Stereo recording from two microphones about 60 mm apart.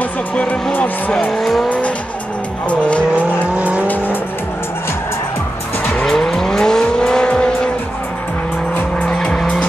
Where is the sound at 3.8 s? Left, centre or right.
Left.